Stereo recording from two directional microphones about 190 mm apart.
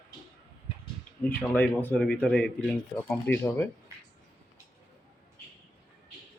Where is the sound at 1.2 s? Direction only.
10° left (ahead or behind).